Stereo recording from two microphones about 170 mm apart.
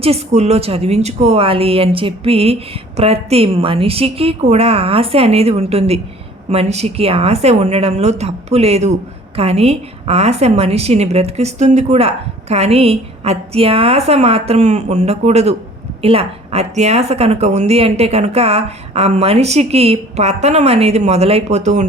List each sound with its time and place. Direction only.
0.0 s a woman's voice: 40° right (ahead or behind)